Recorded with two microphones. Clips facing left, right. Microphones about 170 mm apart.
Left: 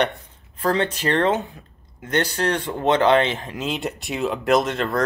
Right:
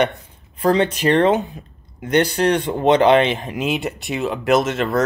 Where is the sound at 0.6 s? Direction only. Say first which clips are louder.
Right 5 dB; 15° right (ahead or behind).